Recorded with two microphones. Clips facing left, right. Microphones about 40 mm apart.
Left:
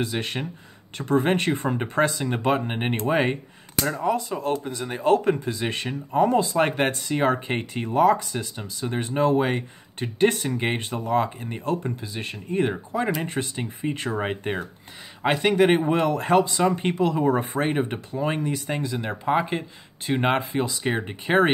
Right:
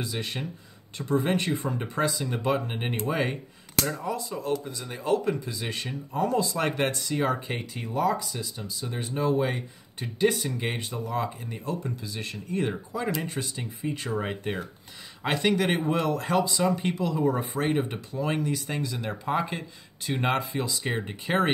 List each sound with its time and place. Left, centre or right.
0.0 s speech: left
17.6 s speech: left